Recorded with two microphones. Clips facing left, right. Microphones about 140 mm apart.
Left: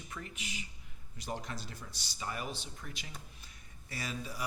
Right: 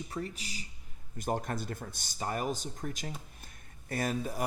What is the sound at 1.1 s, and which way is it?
Speech, 50° right (ahead or behind).